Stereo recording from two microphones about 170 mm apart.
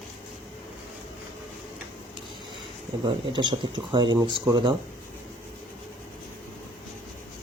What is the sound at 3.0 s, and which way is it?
Speech, 30° right (ahead or behind).